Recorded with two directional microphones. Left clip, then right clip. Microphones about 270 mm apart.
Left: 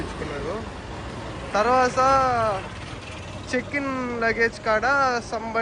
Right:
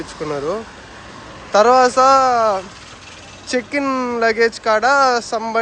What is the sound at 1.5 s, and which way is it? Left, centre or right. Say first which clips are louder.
Speech: right 9 dB; centre.